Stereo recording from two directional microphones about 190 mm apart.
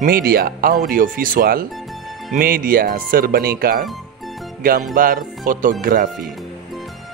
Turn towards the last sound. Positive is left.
turn(degrees=-45)  # may be behind; listen again after turning